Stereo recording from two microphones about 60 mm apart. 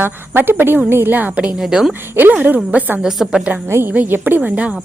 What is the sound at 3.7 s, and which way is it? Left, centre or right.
Speech, right.